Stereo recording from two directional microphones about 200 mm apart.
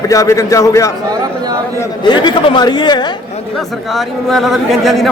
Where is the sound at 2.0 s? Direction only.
20° left (ahead or behind).